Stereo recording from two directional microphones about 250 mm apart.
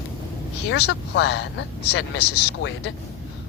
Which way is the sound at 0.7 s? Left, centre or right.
Left.